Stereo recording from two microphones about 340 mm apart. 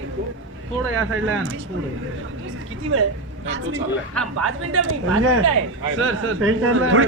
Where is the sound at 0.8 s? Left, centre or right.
Right.